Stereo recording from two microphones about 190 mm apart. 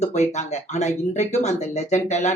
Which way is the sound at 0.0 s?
35° left (ahead or behind).